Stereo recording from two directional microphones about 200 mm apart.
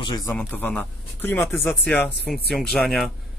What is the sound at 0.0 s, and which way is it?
Speech, 15° left (ahead or behind).